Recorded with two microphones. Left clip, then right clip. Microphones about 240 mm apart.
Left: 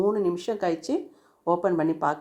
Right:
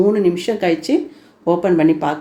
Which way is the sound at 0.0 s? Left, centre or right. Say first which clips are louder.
Right 9 dB; centre.